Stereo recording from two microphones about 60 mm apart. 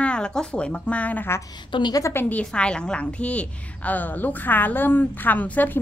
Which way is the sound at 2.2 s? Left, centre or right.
Left.